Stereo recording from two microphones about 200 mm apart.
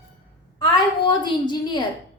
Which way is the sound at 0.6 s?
25° left (ahead or behind).